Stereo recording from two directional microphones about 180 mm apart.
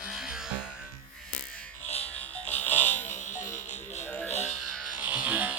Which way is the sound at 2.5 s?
10° left (ahead or behind).